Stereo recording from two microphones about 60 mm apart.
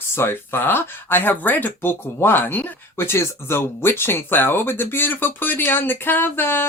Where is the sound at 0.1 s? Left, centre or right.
Left.